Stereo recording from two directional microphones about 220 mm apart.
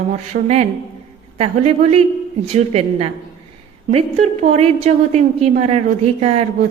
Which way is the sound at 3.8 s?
30° right (ahead or behind).